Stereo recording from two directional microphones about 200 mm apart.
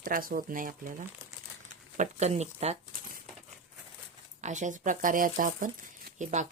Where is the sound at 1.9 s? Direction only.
35° right (ahead or behind).